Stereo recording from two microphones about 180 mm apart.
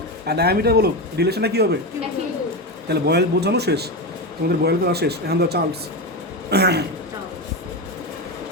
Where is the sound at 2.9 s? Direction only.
65° right (ahead or behind).